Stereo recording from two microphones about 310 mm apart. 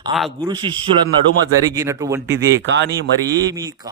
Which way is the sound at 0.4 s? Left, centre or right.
Centre.